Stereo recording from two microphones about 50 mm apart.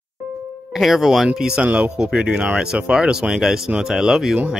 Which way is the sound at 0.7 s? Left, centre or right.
Centre.